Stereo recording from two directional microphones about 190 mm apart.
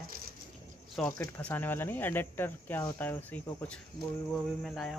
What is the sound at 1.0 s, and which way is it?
Speech, 5° left (ahead or behind).